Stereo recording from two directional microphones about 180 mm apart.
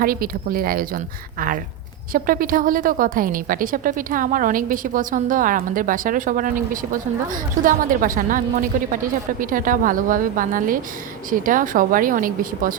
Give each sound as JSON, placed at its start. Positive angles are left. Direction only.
{"t": 0.0, "sound": "a woman's voice", "side_deg": -55}